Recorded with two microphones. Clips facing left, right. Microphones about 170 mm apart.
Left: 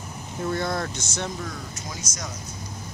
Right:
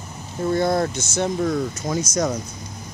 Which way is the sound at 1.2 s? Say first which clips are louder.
Right 12 dB; 45° right (ahead or behind).